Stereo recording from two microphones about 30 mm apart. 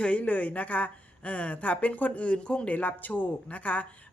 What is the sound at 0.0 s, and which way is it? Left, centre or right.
Speech, left.